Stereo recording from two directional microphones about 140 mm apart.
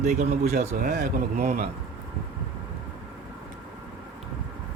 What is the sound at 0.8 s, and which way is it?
Speech, 90° right.